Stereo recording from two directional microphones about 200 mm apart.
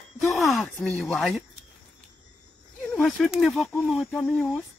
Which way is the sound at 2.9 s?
Centre (ahead or behind).